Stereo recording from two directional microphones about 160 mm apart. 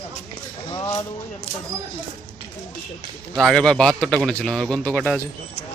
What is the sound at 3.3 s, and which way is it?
A man's voice, centre (ahead or behind).